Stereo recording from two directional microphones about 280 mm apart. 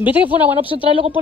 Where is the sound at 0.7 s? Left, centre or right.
Centre.